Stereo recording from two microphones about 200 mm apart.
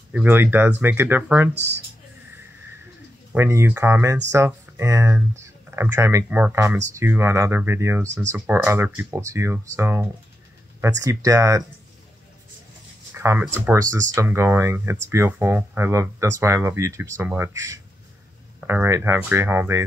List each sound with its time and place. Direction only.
0.1 s speech: 10° right (ahead or behind)
3.3 s speech: 15° right (ahead or behind)
13.2 s speech: 15° right (ahead or behind)